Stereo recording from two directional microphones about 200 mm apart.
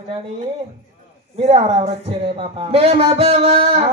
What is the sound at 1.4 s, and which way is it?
A man's voice, 30° right (ahead or behind).